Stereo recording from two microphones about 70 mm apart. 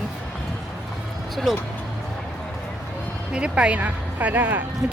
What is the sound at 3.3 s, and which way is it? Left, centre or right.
Speech, centre.